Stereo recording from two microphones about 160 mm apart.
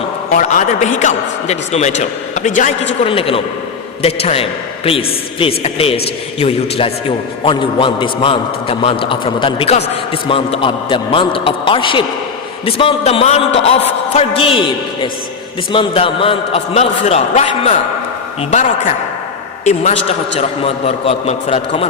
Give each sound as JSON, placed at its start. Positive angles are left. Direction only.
{"t": 0.3, "sound": "a man's voice", "side_deg": 50}
{"t": 3.1, "sound": "a man's voice", "side_deg": 35}